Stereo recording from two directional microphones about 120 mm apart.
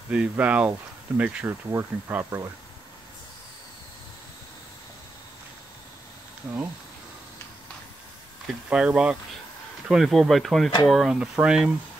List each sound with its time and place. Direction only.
0.1 s speech: 10° right (ahead or behind)
1.5 s speech: 20° right (ahead or behind)
8.6 s speech: 10° right (ahead or behind)